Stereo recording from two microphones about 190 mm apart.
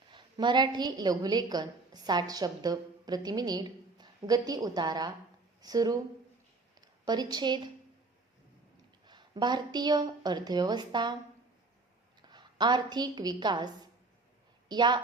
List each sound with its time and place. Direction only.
0.1 s a woman's voice: 25° right (ahead or behind)
9.0 s a woman's voice: 25° right (ahead or behind)
12.2 s a woman's voice: 25° right (ahead or behind)
14.7 s a woman's voice: 25° right (ahead or behind)